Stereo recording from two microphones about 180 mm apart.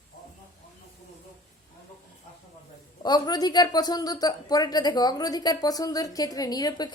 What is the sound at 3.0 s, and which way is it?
Speech, 25° left (ahead or behind).